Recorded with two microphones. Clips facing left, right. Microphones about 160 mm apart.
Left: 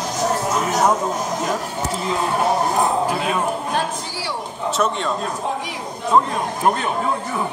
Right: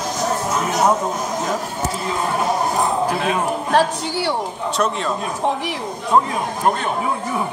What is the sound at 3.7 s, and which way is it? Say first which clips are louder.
Speech: right 9 dB; 90° right.